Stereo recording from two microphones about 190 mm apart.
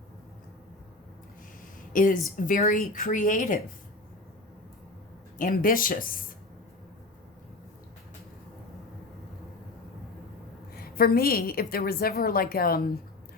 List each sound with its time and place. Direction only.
1.9 s a woman's voice: 45° left (ahead or behind)
5.4 s a woman's voice: 45° left (ahead or behind)
10.8 s a woman's voice: 50° left (ahead or behind)